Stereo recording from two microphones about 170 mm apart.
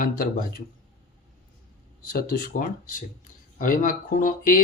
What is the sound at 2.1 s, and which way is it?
Speech, 60° left (ahead or behind).